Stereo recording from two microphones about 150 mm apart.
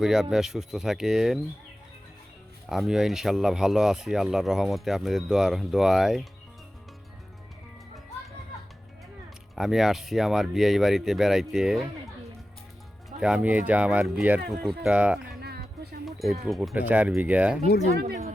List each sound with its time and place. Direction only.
0.0 s speech: 5° right (ahead or behind)
2.6 s speech: centre (ahead or behind)
9.6 s speech: centre (ahead or behind)
13.1 s speech: 5° right (ahead or behind)
15.4 s music: 90° right
16.0 s a sound: centre (ahead or behind)
16.5 s speech: 5° right (ahead or behind)